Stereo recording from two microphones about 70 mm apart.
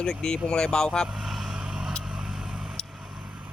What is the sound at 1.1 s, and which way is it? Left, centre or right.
Vehicle, centre.